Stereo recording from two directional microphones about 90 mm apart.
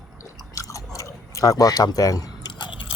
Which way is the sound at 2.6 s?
70° left (ahead or behind).